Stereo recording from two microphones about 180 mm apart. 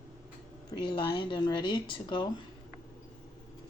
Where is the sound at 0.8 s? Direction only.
25° left (ahead or behind).